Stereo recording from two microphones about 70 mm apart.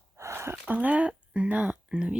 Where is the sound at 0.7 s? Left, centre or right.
Right.